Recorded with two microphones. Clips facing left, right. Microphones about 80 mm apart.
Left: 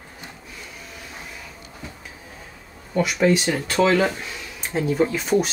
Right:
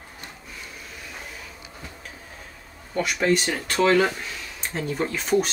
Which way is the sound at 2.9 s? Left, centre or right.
Centre.